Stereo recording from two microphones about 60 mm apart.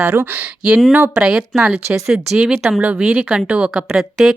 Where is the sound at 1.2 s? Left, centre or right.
Centre.